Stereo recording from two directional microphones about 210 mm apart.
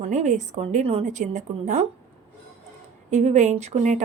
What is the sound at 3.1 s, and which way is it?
Speech, 35° right (ahead or behind).